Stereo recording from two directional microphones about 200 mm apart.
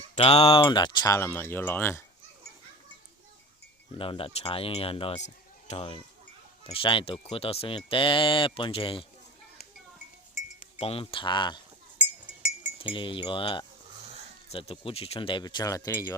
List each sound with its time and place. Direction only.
0.2 s speech: 30° left (ahead or behind); by 2.0 s 10° left (ahead or behind)
3.9 s speech: 25° left (ahead or behind)
10.8 s speech: 30° left (ahead or behind)
11.9 s chink: 5° right (ahead or behind)
12.8 s speech: 25° left (ahead or behind)